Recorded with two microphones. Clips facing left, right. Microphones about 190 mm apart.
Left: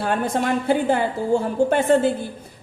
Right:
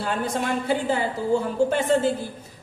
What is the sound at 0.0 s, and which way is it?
A woman's voice, 55° left (ahead or behind).